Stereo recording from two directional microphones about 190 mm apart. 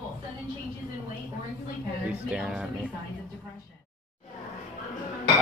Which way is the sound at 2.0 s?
5° right (ahead or behind).